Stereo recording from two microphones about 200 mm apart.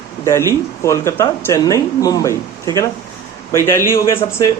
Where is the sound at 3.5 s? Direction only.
15° left (ahead or behind).